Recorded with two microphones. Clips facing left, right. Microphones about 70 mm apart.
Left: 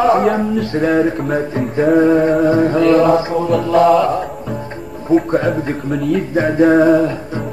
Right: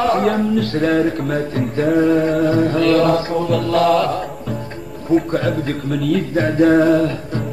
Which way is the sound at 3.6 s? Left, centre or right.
Centre.